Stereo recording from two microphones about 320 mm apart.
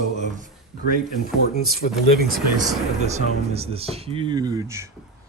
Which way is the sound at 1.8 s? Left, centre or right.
Left.